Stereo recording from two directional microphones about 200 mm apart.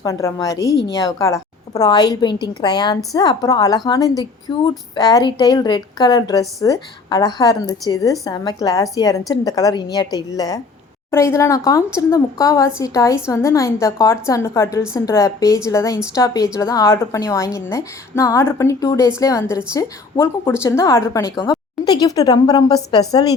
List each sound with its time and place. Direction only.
0.0 s a woman's voice: 15° left (ahead or behind)